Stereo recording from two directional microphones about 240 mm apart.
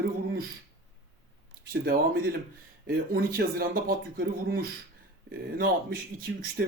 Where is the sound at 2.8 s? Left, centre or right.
Right.